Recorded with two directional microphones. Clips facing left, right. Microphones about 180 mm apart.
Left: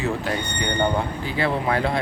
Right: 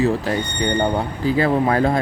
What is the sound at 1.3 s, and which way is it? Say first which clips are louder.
Speech: right 7 dB; 40° right (ahead or behind).